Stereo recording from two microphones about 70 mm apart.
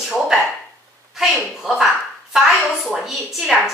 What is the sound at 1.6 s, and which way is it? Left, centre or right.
A woman's voice, centre.